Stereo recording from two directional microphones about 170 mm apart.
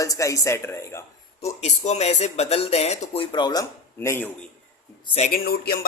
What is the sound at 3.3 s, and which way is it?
Speech, 25° left (ahead or behind).